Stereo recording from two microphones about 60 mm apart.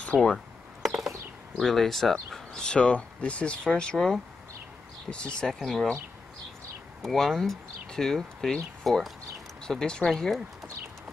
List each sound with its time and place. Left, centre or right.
0.1 s speech: left
0.8 s a sound: centre
1.6 s speech: centre
5.1 s speech: centre
5.5 s speech: centre
7.0 s speech: centre